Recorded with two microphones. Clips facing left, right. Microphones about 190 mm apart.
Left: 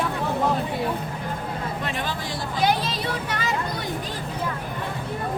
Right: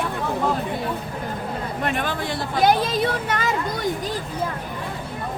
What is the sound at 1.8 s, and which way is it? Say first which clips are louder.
Speech: right 4 dB; 55° right (ahead or behind).